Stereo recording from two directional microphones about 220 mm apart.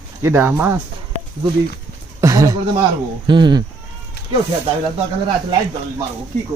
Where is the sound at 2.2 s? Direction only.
15° right (ahead or behind).